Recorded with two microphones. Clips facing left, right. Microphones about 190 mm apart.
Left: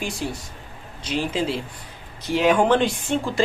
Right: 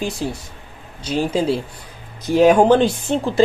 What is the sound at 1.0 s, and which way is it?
Speech, 40° right (ahead or behind).